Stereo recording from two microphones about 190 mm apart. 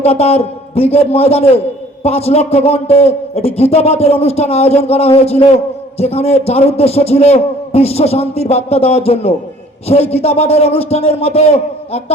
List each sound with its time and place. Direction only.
0.0 s a man's voice: 30° left (ahead or behind)